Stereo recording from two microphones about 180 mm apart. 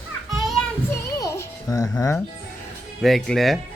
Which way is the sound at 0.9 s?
15° left (ahead or behind).